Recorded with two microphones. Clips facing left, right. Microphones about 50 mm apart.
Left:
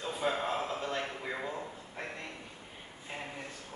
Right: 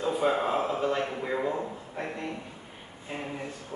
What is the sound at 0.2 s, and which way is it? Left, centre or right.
Speech, right.